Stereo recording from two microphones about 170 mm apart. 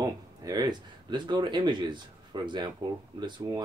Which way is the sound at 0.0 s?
20° right (ahead or behind).